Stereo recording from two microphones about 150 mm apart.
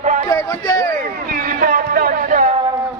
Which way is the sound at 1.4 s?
70° right (ahead or behind).